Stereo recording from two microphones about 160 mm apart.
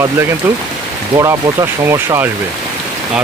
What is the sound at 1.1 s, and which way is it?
Speech, 20° right (ahead or behind).